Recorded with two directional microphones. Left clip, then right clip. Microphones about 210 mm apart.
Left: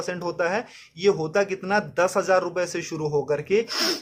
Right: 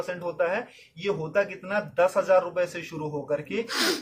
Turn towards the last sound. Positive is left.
turn(degrees=0)  # may be behind; listen again after turning